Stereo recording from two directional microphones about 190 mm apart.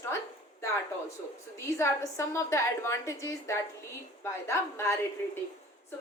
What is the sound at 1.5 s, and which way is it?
A woman's voice, 15° left (ahead or behind).